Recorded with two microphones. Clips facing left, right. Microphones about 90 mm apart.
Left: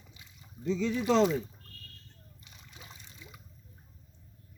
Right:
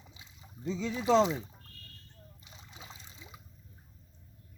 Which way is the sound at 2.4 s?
25° right (ahead or behind).